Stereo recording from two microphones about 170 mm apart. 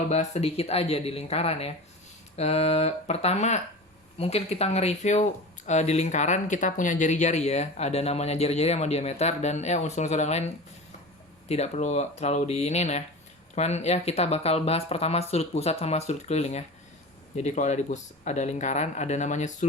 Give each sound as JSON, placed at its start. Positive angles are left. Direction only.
{"t": 0.1, "sound": "speech", "side_deg": 40}